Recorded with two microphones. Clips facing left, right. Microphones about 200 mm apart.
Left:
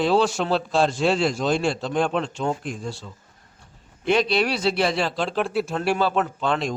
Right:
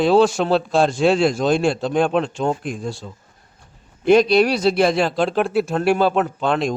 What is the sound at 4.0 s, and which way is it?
A man's voice, 45° right (ahead or behind).